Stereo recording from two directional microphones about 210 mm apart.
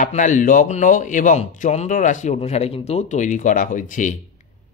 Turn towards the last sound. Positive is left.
turn(degrees=40)  # may be behind; listen again after turning